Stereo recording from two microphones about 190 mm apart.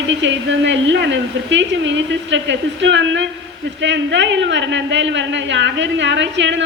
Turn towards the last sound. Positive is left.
turn(degrees=-70)  # may be behind; listen again after turning